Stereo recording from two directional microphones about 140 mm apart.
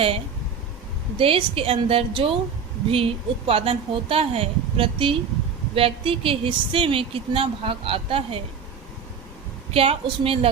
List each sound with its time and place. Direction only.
1.2 s speech: 40° right (ahead or behind)
9.7 s speech: 45° right (ahead or behind)